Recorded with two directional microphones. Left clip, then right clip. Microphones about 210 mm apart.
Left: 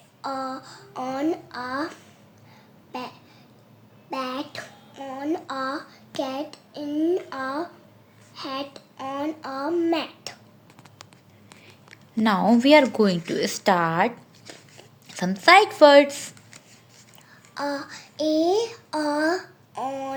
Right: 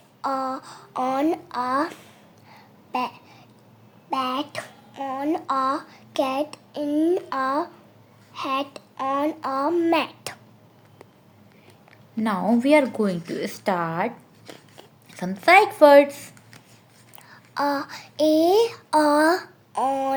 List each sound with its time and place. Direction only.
0.2 s a woman's voice: 50° right (ahead or behind)
2.5 s babbling: 50° right (ahead or behind)
4.1 s a sound: 45° right (ahead or behind)
8.3 s child singing: 50° right (ahead or behind)
12.1 s speech: 10° left (ahead or behind)
17.2 s a sound: 50° right (ahead or behind)